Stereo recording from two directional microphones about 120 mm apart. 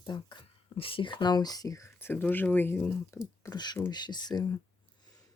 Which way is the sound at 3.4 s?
35° left (ahead or behind).